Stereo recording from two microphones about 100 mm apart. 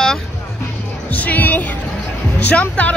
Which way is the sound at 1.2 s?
15° left (ahead or behind).